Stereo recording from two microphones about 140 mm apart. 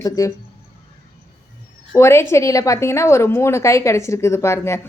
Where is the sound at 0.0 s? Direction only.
25° left (ahead or behind).